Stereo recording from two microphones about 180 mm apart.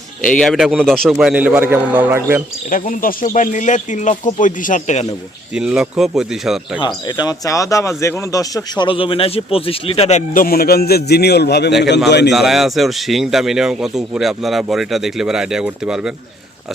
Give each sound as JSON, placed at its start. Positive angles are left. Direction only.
{"t": 0.3, "sound": "a man's voice", "side_deg": 5}
{"t": 2.6, "sound": "speech", "side_deg": 50}
{"t": 5.5, "sound": "speech", "side_deg": -5}
{"t": 6.7, "sound": "a man's voice", "side_deg": 25}
{"t": 12.3, "sound": "speech", "side_deg": 0}